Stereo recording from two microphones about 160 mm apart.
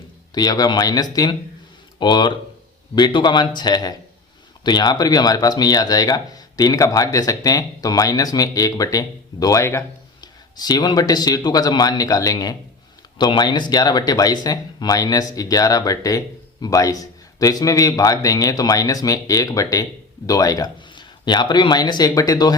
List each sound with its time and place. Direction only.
0.3 s speech: 25° left (ahead or behind)